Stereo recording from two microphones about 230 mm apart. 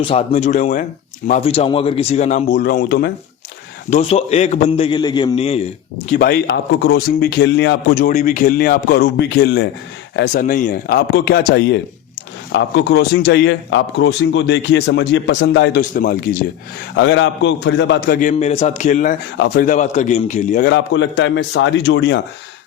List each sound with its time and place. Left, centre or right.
0.0 s speech: left
3.8 s speech: left
6.1 s a man's voice: left
15.8 s a man's voice: left
16.9 s a man's voice: left
20.7 s a man's voice: left